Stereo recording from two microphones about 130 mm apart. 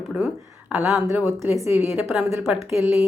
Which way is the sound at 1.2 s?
20° right (ahead or behind).